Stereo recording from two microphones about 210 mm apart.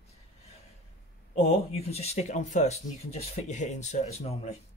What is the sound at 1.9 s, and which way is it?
Speech, 30° left (ahead or behind).